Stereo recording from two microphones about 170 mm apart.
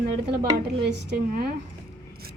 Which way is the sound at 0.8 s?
75° right (ahead or behind).